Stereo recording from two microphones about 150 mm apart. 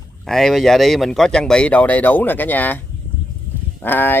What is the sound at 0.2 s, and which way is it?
Speech, centre (ahead or behind).